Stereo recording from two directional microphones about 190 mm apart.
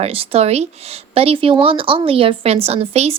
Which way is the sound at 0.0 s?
30° right (ahead or behind).